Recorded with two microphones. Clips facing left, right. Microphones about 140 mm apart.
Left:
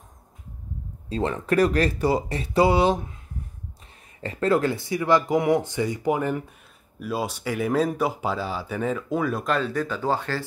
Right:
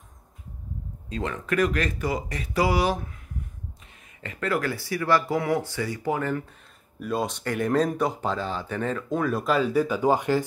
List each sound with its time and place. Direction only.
1.0 s speech: 30° left (ahead or behind)
4.2 s speech: 30° left (ahead or behind)
7.0 s speech: 5° left (ahead or behind); by 10.4 s 15° right (ahead or behind)